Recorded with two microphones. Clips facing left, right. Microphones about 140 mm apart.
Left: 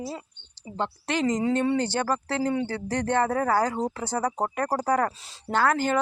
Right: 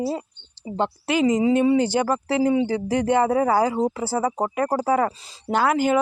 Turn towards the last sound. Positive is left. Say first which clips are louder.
# right 4 dB
turn(degrees=-10)  # may be behind; listen again after turning